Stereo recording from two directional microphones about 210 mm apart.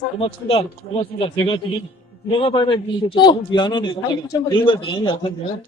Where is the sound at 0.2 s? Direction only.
25° left (ahead or behind).